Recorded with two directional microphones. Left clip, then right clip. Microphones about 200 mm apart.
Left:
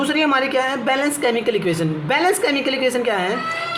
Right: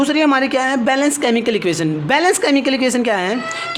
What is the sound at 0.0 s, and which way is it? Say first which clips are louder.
A woman's voice: right 3 dB; 55° right (ahead or behind).